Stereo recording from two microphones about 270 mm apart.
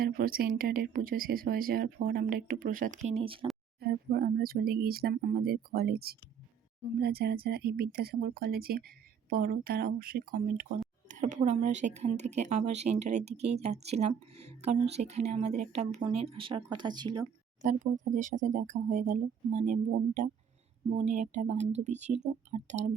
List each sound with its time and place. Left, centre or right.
0.0 s speech: right
3.8 s speech: right; by 17.2 s centre
17.6 s speech: right